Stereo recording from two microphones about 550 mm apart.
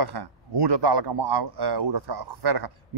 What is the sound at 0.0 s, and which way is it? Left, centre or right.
Speech, right.